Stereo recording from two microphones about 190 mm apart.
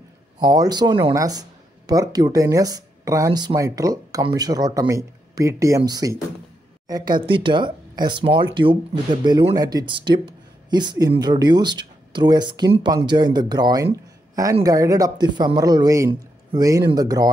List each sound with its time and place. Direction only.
0.4 s speech: 20° right (ahead or behind)